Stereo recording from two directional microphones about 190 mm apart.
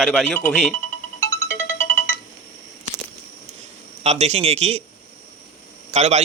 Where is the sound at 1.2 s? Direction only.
10° left (ahead or behind).